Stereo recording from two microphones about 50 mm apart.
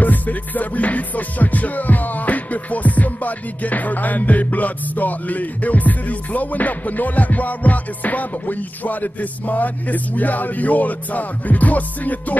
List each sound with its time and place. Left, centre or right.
0.0 s music: left